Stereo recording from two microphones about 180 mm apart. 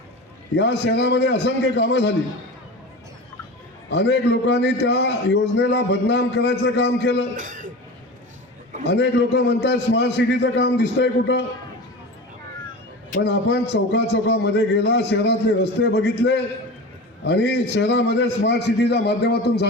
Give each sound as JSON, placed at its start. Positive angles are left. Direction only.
{"t": 0.5, "sound": "a man's voice", "side_deg": 70}
{"t": 3.9, "sound": "a man's voice", "side_deg": 70}
{"t": 7.3, "sound": "speech", "side_deg": -45}
{"t": 8.8, "sound": "a man's voice", "side_deg": 70}
{"t": 13.2, "sound": "a man's voice", "side_deg": 70}
{"t": 17.2, "sound": "a man's voice", "side_deg": 70}